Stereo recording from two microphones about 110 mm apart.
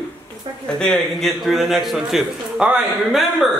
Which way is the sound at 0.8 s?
5° left (ahead or behind).